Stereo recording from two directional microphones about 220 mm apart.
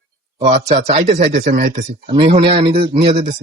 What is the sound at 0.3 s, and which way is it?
Speech, 30° right (ahead or behind).